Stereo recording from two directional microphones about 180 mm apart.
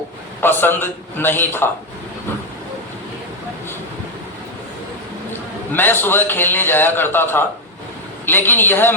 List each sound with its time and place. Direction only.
0.4 s a man's voice: 10° left (ahead or behind)
5.7 s a man's voice: 10° left (ahead or behind)